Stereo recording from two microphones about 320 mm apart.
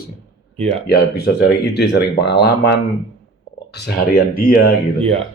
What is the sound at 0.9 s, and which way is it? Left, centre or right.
Speech, left.